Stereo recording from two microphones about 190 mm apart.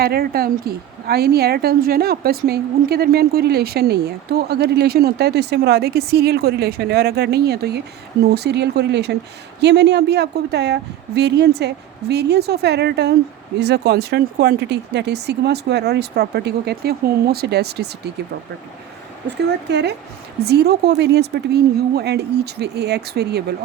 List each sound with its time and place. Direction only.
0.0 s a woman's voice: 55° right (ahead or behind)
19.6 s a woman's voice: 60° right (ahead or behind)